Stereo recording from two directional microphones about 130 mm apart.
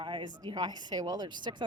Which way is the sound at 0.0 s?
40° right (ahead or behind).